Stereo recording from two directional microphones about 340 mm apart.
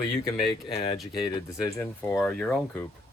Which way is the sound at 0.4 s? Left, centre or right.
Centre.